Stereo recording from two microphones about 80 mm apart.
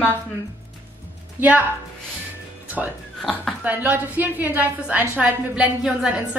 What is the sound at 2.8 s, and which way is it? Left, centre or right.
Speech, centre.